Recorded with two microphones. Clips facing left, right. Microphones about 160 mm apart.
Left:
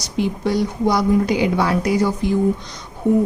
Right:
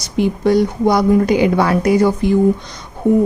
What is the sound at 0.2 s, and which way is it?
Speech, 55° right (ahead or behind).